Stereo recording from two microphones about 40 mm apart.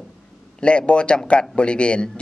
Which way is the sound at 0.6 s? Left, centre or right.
Left.